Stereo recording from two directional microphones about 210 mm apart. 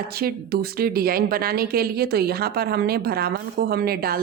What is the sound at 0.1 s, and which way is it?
A woman's voice, 45° right (ahead or behind).